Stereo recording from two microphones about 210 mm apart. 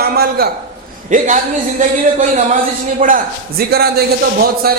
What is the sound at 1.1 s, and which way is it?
A man's voice, 40° right (ahead or behind).